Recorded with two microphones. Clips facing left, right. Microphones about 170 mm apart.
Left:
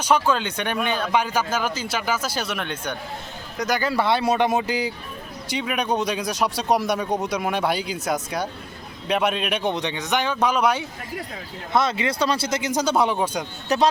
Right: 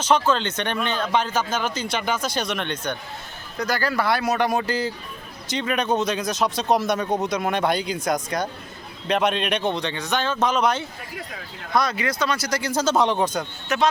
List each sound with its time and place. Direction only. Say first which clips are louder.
0.0 s speech: even; 10° left (ahead or behind)
3.6 s a man's voice: left 1 dB; 20° left (ahead or behind)
9.6 s speech: even; 15° left (ahead or behind)
11.7 s speech: left 1 dB; 25° left (ahead or behind); by 13.4 s 10° left (ahead or behind)
13.7 s speech: left 2 dB; 35° left (ahead or behind)